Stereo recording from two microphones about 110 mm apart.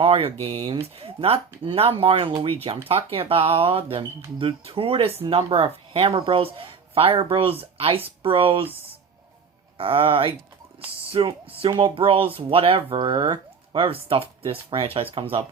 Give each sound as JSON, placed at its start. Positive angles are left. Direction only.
{"t": 0.0, "sound": "speech", "side_deg": -60}
{"t": 9.7, "sound": "speech", "side_deg": -55}
{"t": 12.9, "sound": "speech", "side_deg": -40}